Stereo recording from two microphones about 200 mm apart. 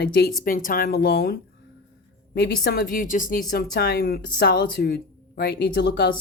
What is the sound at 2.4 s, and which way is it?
A woman's voice, 50° left (ahead or behind).